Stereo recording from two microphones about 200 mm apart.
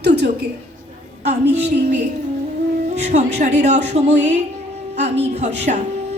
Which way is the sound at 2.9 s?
35° right (ahead or behind).